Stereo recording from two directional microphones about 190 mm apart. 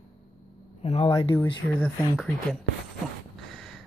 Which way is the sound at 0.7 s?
30° left (ahead or behind).